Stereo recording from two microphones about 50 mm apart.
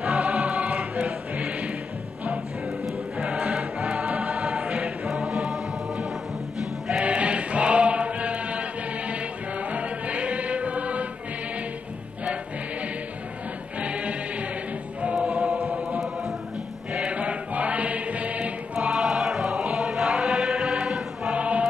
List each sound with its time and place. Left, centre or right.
0.0 s choir: centre
1.3 s music: right
3.2 s music: centre
4.2 s choir: centre
5.1 s music: right
7.0 s choir: right
9.1 s music: right
13.7 s choir: right
16.9 s music: right
18.8 s music: centre
19.7 s chant: centre
21.3 s music: right